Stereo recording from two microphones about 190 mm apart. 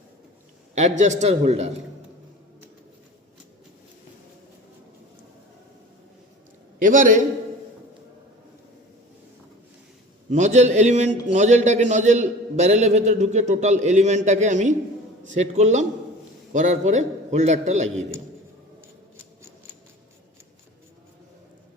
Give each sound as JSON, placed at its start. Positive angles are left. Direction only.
{"t": 0.8, "sound": "a man's voice", "side_deg": -40}
{"t": 6.7, "sound": "a man's voice", "side_deg": -45}
{"t": 10.3, "sound": "a man's voice", "side_deg": -40}